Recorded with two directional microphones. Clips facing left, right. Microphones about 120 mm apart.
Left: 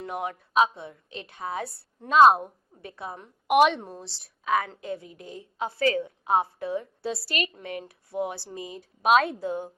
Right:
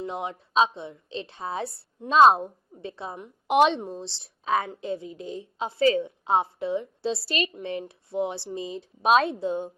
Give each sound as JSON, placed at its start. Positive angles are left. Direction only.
{"t": 0.0, "sound": "a woman's voice", "side_deg": -25}